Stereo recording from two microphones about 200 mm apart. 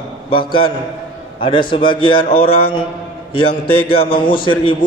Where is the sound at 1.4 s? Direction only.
25° left (ahead or behind).